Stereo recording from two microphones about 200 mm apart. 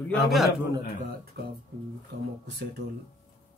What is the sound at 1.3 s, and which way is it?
Speech, 55° right (ahead or behind).